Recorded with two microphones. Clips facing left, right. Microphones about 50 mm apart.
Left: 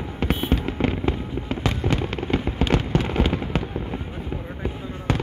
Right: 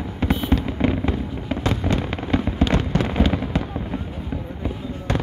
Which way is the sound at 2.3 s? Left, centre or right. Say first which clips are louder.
Right 3 dB; centre.